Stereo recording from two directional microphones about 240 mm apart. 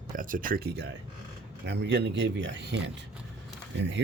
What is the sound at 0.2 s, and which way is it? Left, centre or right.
Speech, right.